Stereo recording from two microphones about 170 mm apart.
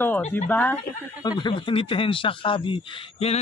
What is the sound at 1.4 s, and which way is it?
Speech, 30° left (ahead or behind).